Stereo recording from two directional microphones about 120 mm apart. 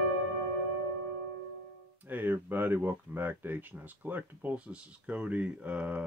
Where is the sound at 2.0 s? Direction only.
15° right (ahead or behind).